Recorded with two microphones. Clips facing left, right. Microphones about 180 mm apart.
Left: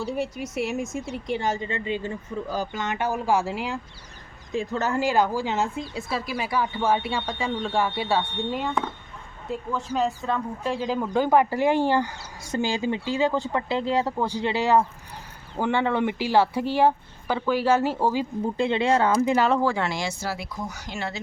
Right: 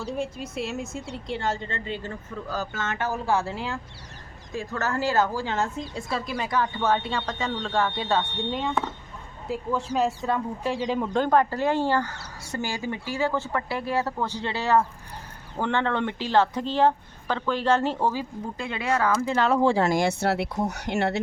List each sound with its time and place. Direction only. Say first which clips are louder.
0.5 s speech: left 6 dB; 15° left (ahead or behind)
9.5 s speech: right 1 dB; 5° right (ahead or behind)
18.1 s speech: left 5 dB; 20° left (ahead or behind)
19.6 s speech: right 3 dB; 35° right (ahead or behind)
19.9 s speech: right 7 dB; 55° right (ahead or behind)